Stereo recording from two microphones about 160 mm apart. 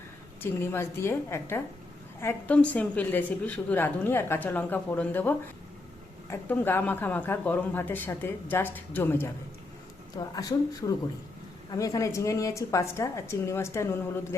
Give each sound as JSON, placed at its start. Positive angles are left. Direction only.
{"t": 0.6, "sound": "a woman's voice", "side_deg": 15}